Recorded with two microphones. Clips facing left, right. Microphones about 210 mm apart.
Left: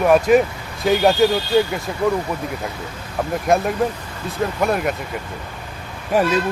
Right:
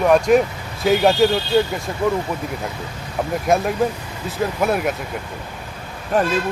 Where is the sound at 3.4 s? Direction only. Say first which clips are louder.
Even; centre (ahead or behind).